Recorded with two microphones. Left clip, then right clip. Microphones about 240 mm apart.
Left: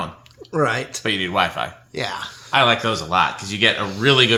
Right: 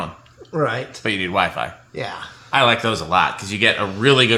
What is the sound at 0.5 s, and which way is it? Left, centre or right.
Speech, left.